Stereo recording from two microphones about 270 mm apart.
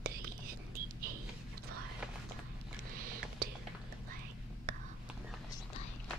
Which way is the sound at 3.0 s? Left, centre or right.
Right.